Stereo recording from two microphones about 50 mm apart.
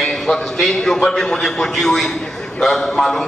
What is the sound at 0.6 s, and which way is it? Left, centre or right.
A man's voice, centre.